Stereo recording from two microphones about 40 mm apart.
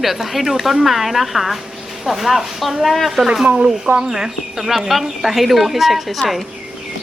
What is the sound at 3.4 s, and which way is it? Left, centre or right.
Speech, right.